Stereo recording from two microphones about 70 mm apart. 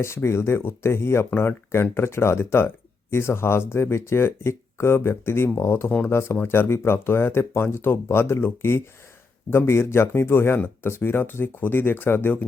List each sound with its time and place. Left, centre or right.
0.0 s speech: left